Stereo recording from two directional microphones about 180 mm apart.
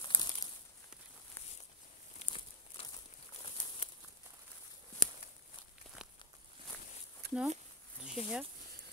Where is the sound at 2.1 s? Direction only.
30° left (ahead or behind).